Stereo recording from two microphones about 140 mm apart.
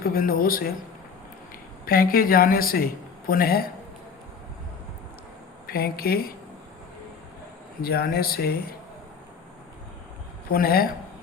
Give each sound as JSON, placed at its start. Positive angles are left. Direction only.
{"t": 0.0, "sound": "a man's voice", "side_deg": 90}
{"t": 1.8, "sound": "a man's voice", "side_deg": 90}
{"t": 5.6, "sound": "a man's voice", "side_deg": 90}
{"t": 7.8, "sound": "a man's voice", "side_deg": 90}
{"t": 10.5, "sound": "a man's voice", "side_deg": 90}